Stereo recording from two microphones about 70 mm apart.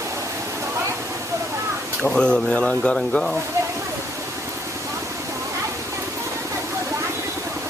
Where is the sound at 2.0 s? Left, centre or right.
Centre.